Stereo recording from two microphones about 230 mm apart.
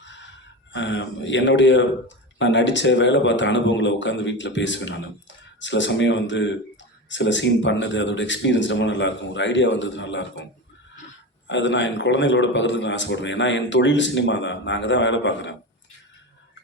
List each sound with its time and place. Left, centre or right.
0.0 s gasp: left
0.7 s a man's voice: left
11.4 s a man's voice: left